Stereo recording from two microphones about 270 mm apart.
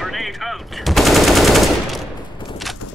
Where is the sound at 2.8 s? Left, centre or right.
Left.